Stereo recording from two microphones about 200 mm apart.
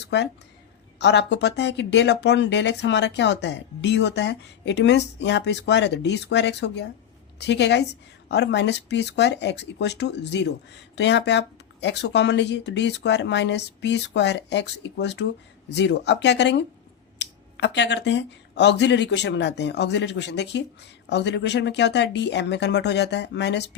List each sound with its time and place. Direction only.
0.9 s speech: 60° left (ahead or behind)